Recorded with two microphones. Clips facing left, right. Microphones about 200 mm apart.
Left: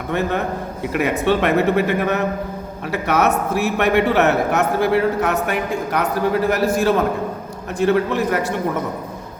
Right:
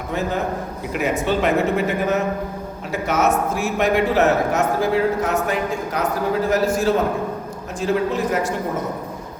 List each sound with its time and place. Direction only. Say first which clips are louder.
0.1 s a man's voice: left 2 dB; 65° left (ahead or behind)